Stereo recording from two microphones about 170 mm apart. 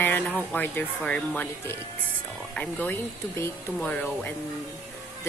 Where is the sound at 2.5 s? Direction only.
10° left (ahead or behind).